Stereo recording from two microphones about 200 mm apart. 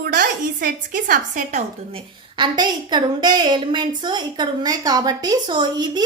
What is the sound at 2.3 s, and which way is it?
A woman's voice, 20° right (ahead or behind).